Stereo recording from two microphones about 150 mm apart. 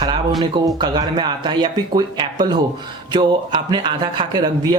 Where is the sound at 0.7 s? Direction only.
30° right (ahead or behind).